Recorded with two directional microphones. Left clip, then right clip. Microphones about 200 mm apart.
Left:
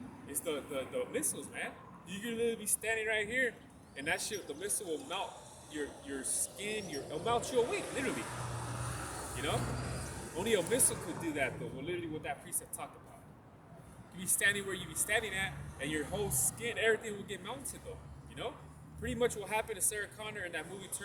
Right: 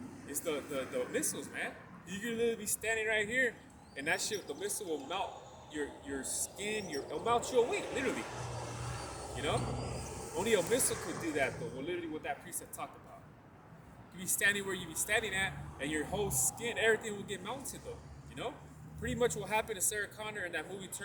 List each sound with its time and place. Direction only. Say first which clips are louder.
0.3 s speech: right 1 dB; 10° right (ahead or behind)
9.6 s vehicle: right 1 dB; centre (ahead or behind)
10.9 s speech: right 2 dB; 20° right (ahead or behind)
11.2 s speech: right 1 dB; 5° right (ahead or behind)
14.2 s speech: even; 5° right (ahead or behind)